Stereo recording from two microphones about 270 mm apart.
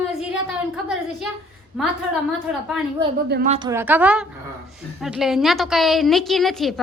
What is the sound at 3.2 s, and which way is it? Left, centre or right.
Speech, right.